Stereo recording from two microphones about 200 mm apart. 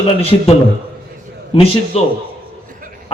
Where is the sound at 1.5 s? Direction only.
30° left (ahead or behind).